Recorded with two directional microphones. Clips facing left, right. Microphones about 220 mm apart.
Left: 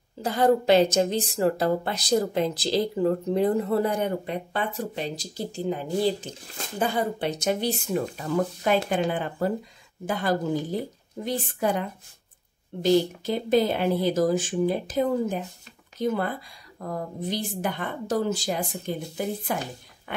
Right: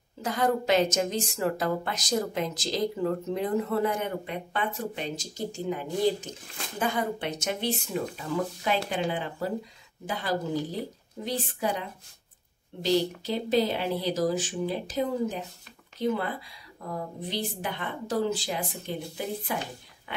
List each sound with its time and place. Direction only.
0.2 s a woman's voice: 30° left (ahead or behind); by 20.2 s 50° left (ahead or behind)